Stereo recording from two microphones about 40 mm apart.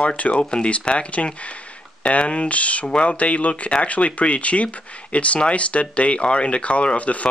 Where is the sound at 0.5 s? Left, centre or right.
Left.